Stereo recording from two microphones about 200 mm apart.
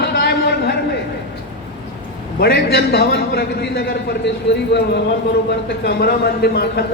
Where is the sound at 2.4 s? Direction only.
55° left (ahead or behind).